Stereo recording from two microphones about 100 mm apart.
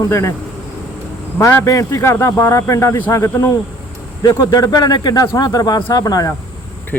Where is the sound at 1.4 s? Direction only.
30° left (ahead or behind).